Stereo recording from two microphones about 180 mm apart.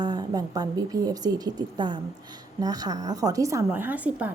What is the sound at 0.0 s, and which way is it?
A woman's voice, 20° right (ahead or behind).